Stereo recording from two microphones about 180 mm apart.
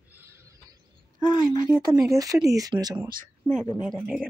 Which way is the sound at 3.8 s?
Centre (ahead or behind).